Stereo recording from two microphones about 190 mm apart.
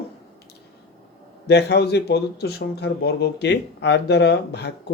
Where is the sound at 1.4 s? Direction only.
60° left (ahead or behind).